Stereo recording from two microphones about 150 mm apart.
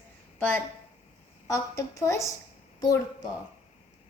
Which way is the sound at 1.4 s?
20° left (ahead or behind).